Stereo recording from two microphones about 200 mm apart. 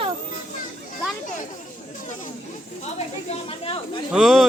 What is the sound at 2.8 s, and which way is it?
Speech, 30° left (ahead or behind).